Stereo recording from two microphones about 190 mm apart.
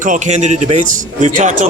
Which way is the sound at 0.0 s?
40° right (ahead or behind).